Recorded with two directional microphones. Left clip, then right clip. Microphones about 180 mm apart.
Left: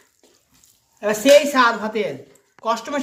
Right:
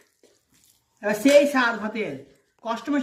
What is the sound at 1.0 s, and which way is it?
Speech, 35° left (ahead or behind).